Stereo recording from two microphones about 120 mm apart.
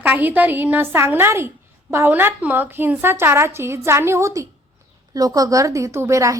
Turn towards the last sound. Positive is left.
turn(degrees=-25)  # may be behind; listen again after turning